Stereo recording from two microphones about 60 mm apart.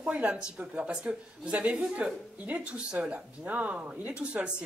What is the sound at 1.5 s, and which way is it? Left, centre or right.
A woman's voice, right.